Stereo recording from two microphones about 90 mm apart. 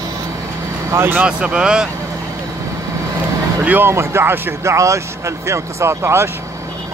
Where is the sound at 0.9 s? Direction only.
25° right (ahead or behind).